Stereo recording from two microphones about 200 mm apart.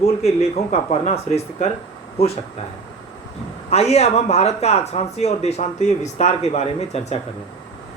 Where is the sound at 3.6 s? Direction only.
30° left (ahead or behind).